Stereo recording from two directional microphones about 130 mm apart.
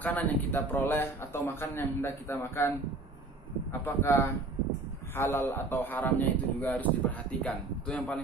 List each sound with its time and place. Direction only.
0.0 s a man's voice: 10° left (ahead or behind)
3.8 s a man's voice: 15° left (ahead or behind)